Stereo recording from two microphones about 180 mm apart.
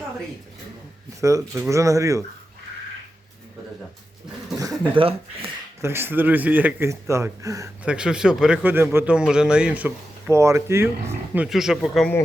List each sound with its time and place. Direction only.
1.2 s speech: 20° right (ahead or behind)
4.9 s speech: 30° right (ahead or behind)
5.8 s speech: 15° right (ahead or behind)
7.9 s speech: 5° right (ahead or behind)
11.4 s speech: centre (ahead or behind)